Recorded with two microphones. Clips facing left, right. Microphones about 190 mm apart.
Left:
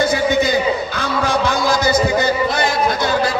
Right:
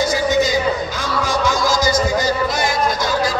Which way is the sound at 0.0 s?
60° left (ahead or behind).